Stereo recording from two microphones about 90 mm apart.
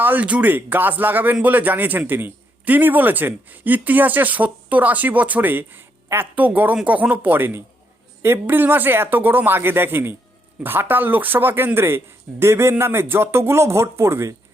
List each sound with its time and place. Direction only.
0.0 s speech: 20° right (ahead or behind)